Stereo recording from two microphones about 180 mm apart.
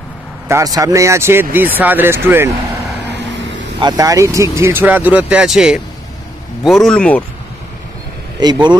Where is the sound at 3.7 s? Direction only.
20° right (ahead or behind); by 7.2 s 5° left (ahead or behind).